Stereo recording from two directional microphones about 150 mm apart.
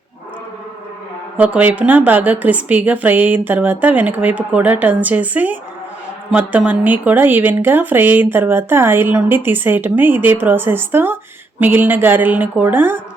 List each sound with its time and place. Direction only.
1.4 s speech: 10° right (ahead or behind)